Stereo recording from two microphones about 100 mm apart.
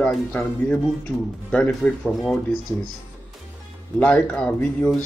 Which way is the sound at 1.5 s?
15° left (ahead or behind).